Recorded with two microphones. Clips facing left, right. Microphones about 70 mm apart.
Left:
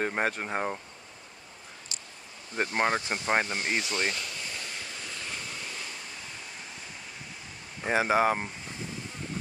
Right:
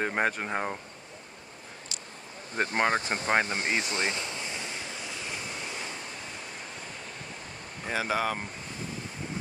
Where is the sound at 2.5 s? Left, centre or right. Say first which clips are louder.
Right 1 dB; right.